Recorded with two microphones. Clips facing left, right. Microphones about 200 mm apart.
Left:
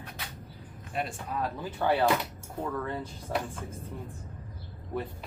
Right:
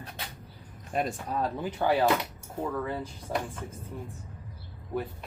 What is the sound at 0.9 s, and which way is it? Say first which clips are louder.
Speech: right 3 dB; 40° right (ahead or behind).